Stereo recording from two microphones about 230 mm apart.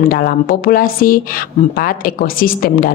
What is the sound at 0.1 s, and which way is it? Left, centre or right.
A woman's voice, left.